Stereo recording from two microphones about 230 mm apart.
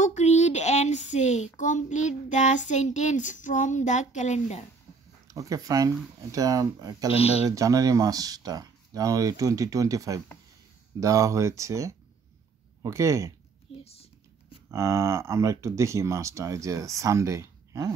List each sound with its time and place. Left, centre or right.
0.0 s speech: left
5.3 s speech: centre
7.1 s speech: left
7.4 s speech: centre
13.7 s a sound: left
14.7 s speech: centre